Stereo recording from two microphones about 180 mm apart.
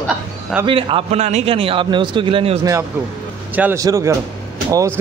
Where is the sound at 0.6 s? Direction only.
30° right (ahead or behind).